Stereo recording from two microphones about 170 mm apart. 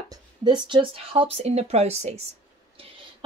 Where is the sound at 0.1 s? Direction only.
25° right (ahead or behind).